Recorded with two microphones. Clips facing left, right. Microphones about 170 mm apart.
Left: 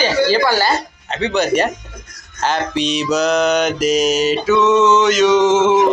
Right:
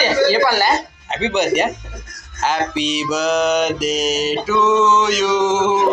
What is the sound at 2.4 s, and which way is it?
Mantra, 10° right (ahead or behind).